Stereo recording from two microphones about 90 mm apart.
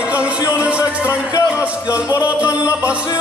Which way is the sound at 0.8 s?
30° left (ahead or behind).